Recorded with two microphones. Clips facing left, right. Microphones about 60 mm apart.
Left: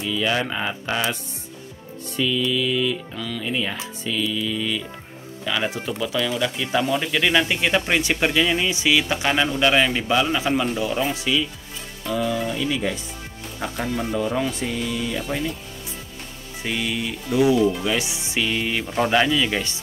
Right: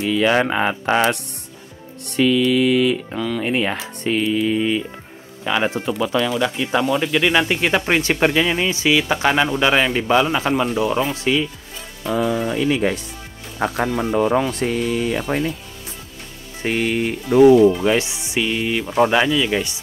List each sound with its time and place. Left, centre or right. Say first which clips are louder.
0.0 s a man's voice: right 6 dB; right
6.3 s a man's voice: right 3 dB; centre
11.3 s speech: right 4 dB; right
12.1 s speech: right 4 dB; right
13.6 s speech: right 6 dB; right
16.6 s speech: right 6 dB; right
18.4 s speech: right 3 dB; centre